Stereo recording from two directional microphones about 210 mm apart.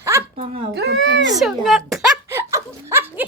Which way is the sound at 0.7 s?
55° right (ahead or behind).